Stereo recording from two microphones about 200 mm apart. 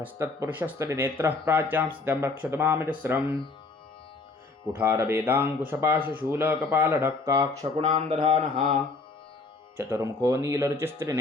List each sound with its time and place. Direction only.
0.0 s speech: 10° right (ahead or behind)
4.7 s speech: 15° right (ahead or behind)
9.7 s speech: 10° right (ahead or behind)